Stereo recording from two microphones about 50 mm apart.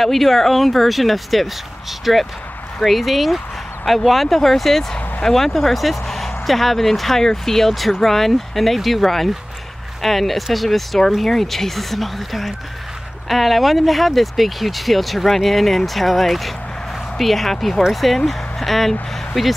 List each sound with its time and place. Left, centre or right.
0.0 s speech: centre